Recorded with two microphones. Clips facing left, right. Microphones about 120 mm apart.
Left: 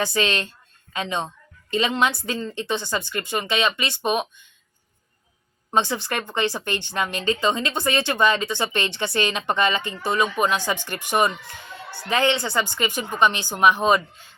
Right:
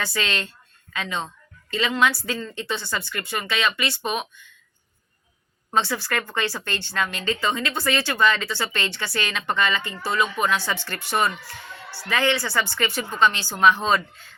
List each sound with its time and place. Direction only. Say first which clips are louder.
0.0 s a woman's voice: left 4 dB; 20° left (ahead or behind)
5.7 s a woman's voice: left 1 dB; 20° left (ahead or behind)